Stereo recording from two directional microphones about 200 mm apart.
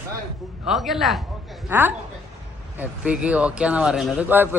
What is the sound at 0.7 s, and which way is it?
A man's voice, centre (ahead or behind).